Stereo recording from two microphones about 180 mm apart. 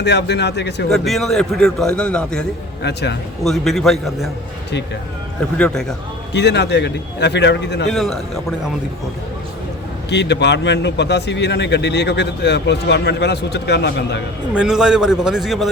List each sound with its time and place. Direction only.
0.0 s a man's voice: 70° left (ahead or behind)
0.9 s a man's voice: centre (ahead or behind)
2.8 s a man's voice: 70° left (ahead or behind)
3.4 s a man's voice: centre (ahead or behind)
5.5 s a man's voice: 5° left (ahead or behind)
6.3 s a man's voice: 70° left (ahead or behind)
7.9 s a man's voice: centre (ahead or behind)
10.1 s a man's voice: 70° left (ahead or behind)
14.5 s a man's voice: 5° right (ahead or behind)